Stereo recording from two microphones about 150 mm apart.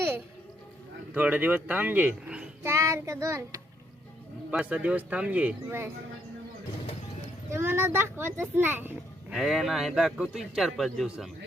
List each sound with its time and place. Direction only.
1.1 s a child's voice: 10° right (ahead or behind)
2.6 s child singing: 20° right (ahead or behind)
4.5 s a child's voice: 10° right (ahead or behind)
7.5 s a child's voice: 15° right (ahead or behind)
9.3 s a man's voice: centre (ahead or behind)